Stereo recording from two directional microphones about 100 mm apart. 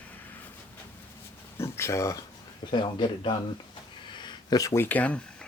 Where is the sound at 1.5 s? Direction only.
25° left (ahead or behind).